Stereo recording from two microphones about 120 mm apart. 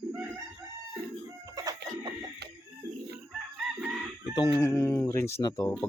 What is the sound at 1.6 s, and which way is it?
Chicken, 30° right (ahead or behind).